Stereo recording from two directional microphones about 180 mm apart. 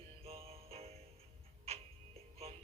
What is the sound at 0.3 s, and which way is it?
Music, 35° right (ahead or behind).